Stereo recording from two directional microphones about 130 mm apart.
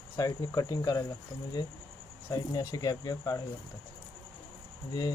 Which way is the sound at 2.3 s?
30° left (ahead or behind).